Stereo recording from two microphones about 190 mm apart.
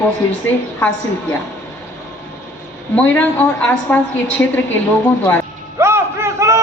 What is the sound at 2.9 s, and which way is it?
A woman's voice, 5° left (ahead or behind).